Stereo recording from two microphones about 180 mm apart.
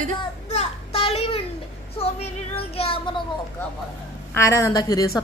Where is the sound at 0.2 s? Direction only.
35° left (ahead or behind).